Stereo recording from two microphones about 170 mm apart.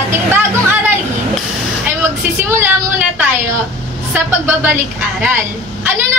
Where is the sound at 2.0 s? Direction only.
10° right (ahead or behind).